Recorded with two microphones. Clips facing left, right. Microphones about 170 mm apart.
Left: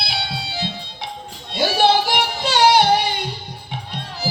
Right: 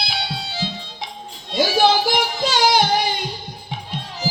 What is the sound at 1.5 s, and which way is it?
Music, 65° left (ahead or behind).